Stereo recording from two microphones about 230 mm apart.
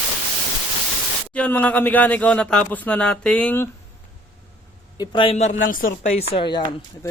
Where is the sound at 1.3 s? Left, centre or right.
Centre.